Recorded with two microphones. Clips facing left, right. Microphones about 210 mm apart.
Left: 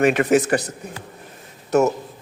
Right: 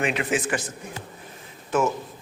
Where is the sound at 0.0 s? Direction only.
45° left (ahead or behind).